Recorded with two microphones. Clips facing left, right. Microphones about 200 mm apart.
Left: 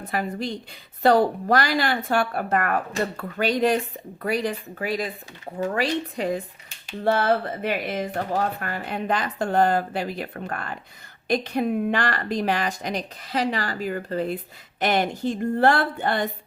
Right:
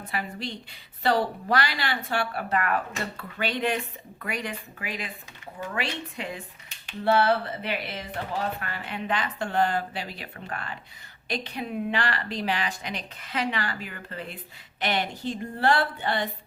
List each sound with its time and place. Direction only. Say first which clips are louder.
0.1 s a woman's voice: left 6 dB; 45° left (ahead or behind)